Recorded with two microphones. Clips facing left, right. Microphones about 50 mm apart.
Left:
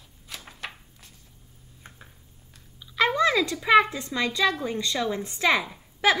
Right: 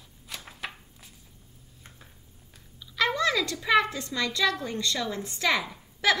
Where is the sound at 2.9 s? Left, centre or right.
Left.